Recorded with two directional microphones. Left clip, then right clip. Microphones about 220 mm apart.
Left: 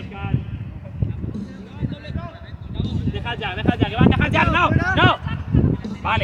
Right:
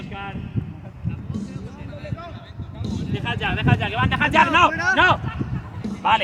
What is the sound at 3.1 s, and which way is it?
Speech, 30° right (ahead or behind).